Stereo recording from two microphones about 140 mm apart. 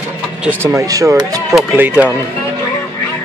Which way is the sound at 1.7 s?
10° right (ahead or behind).